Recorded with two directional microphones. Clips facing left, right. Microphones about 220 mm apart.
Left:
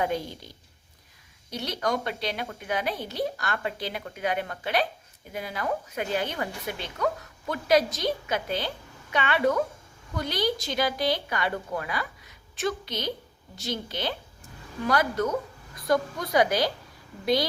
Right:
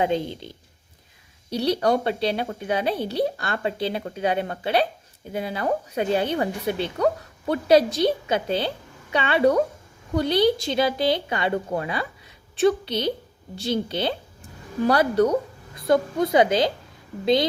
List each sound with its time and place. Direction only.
0.0 s a woman's voice: 25° right (ahead or behind)